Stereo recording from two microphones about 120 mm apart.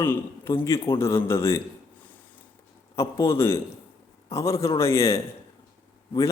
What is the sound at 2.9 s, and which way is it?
A man's voice, 25° left (ahead or behind).